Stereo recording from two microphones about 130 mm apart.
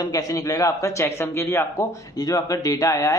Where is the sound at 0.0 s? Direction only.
30° left (ahead or behind).